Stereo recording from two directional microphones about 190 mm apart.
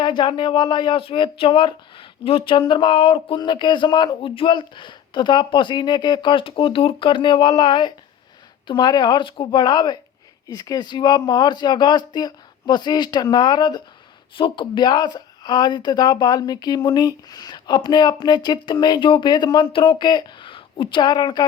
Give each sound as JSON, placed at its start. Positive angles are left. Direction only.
{"t": 0.0, "sound": "speech", "side_deg": 25}